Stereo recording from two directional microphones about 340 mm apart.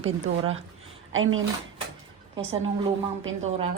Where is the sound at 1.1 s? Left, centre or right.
Right.